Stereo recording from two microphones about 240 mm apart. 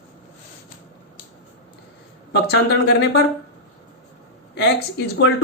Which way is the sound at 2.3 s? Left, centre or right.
Left.